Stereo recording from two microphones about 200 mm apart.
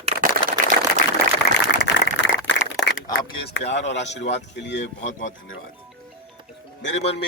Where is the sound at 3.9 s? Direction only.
60° left (ahead or behind).